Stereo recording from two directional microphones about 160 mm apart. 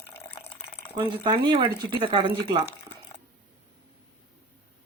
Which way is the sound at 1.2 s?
30° right (ahead or behind).